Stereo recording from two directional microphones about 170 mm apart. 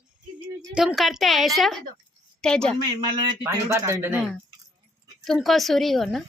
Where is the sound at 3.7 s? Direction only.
15° right (ahead or behind).